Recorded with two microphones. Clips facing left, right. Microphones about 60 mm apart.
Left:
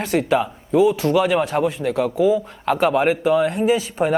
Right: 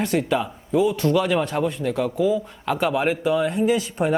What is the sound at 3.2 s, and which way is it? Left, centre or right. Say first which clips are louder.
Speech: left 3 dB; centre.